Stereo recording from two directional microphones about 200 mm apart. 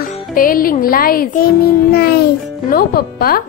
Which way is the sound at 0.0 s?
45° left (ahead or behind).